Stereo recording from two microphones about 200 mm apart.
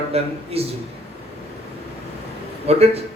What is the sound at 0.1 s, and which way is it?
Speech, 30° right (ahead or behind).